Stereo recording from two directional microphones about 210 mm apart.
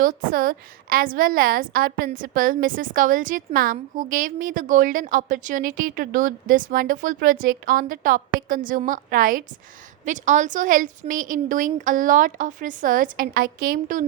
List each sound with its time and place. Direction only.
0.0 s a woman's voice: 40° right (ahead or behind)